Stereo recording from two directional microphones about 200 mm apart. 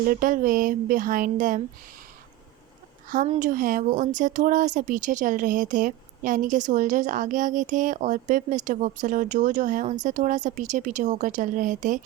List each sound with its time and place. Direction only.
0.0 s speech: 45° right (ahead or behind)
3.1 s speech: 40° right (ahead or behind)